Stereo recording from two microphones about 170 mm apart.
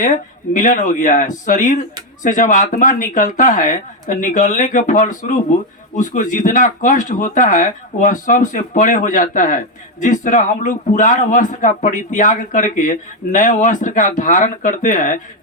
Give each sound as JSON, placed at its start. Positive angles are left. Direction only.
{"t": 0.5, "sound": "speech", "side_deg": 50}